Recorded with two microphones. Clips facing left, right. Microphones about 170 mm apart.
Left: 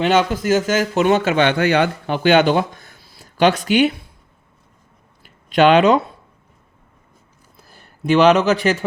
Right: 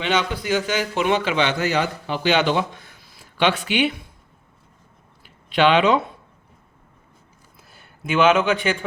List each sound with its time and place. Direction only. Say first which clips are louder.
0.0 s a man's voice: left 6 dB; 45° left (ahead or behind)
5.5 s a man's voice: left 4 dB; 45° left (ahead or behind)
7.8 s a man's voice: left 5 dB; 35° left (ahead or behind)